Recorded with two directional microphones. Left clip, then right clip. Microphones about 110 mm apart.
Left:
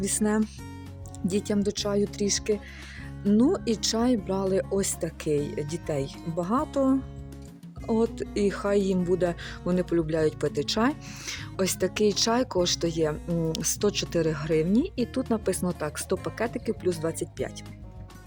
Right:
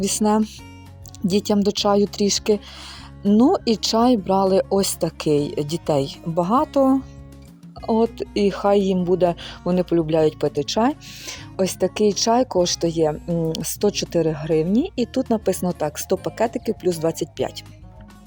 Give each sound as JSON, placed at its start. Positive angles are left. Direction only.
{"t": 0.0, "sound": "speech", "side_deg": -30}
{"t": 3.5, "sound": "speech", "side_deg": -30}